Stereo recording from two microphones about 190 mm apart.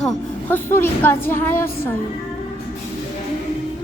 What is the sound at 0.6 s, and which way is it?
Speech, 10° left (ahead or behind).